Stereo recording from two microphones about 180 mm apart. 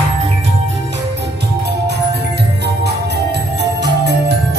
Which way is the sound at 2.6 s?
70° right (ahead or behind).